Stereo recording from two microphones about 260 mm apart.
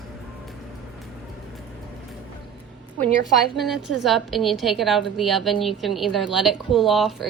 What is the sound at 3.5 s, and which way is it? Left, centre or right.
A woman's voice, centre.